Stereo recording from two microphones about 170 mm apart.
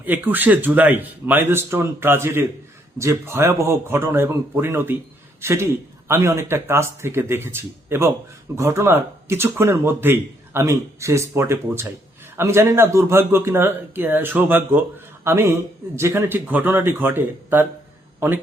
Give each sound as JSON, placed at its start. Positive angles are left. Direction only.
{"t": 0.0, "sound": "a man's voice", "side_deg": -10}